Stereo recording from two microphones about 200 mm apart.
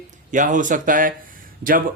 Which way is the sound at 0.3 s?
40° right (ahead or behind).